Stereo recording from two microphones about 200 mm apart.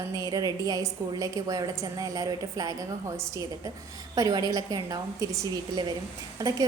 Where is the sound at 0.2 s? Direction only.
20° right (ahead or behind).